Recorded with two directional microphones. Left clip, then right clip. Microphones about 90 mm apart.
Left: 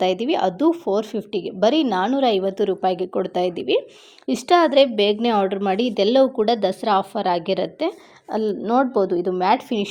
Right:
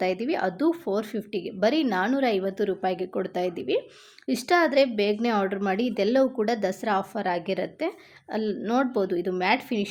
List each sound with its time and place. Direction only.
0.3 s a woman's voice: 20° left (ahead or behind)
8.6 s a woman's voice: 5° left (ahead or behind)